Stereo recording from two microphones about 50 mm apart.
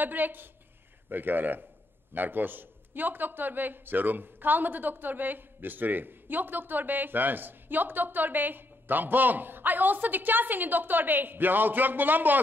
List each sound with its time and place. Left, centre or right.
0.0 s a man's voice: right